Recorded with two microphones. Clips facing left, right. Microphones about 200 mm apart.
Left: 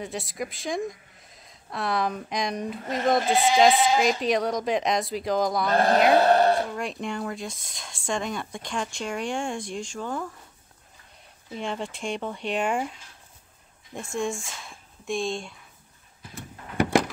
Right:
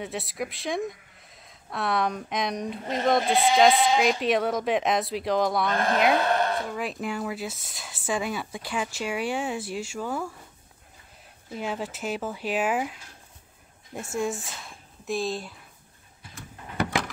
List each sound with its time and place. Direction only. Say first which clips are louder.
0.0 s speech: even; centre (ahead or behind)
5.7 s a woman's voice: left 4 dB; 35° left (ahead or behind)
6.1 s a sound: left 6 dB; 35° left (ahead or behind)
6.7 s speech: even; 5° right (ahead or behind)
11.5 s speech: even; 5° right (ahead or behind)
14.1 s speech: even; 5° right (ahead or behind)